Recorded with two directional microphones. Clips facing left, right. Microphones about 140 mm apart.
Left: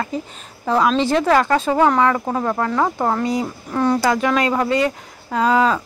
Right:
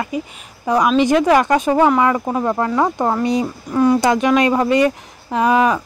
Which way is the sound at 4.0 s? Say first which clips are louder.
Right 3 dB; 20° right (ahead or behind).